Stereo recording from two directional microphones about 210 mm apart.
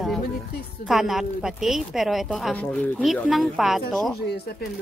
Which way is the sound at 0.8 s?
Centre (ahead or behind).